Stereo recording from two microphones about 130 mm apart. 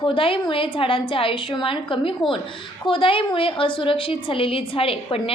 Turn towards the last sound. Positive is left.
turn(degrees=45)  # may be behind; listen again after turning